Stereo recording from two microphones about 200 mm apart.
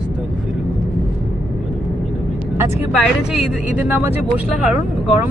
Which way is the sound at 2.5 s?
10° right (ahead or behind).